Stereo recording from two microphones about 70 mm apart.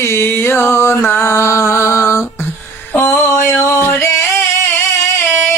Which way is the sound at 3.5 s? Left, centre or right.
Left.